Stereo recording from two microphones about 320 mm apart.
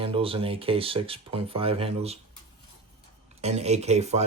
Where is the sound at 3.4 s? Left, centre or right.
Centre.